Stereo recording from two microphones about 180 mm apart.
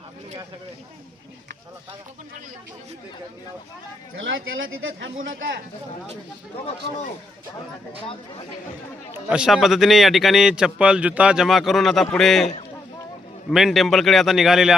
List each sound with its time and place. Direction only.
4.2 s speech: 90° right
9.1 s a man's voice: 5° right (ahead or behind)
13.5 s a man's voice: centre (ahead or behind)